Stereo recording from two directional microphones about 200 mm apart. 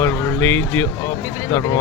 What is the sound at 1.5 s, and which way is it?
Speech, 15° left (ahead or behind).